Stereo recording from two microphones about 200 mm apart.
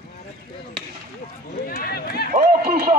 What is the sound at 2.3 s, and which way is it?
Speech, 50° right (ahead or behind).